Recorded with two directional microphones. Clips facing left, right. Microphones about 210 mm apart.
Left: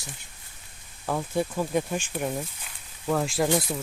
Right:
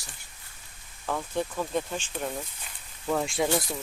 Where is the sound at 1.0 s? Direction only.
10° left (ahead or behind).